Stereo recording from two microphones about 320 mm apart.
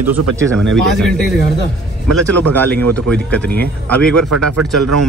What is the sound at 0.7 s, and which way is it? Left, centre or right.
Speech, centre.